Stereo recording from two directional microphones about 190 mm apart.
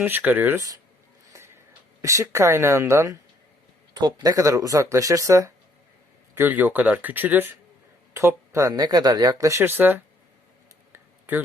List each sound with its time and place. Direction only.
0.0 s speech: 10° right (ahead or behind)
2.0 s speech: 15° right (ahead or behind)
10.9 s tick-tock: 10° right (ahead or behind)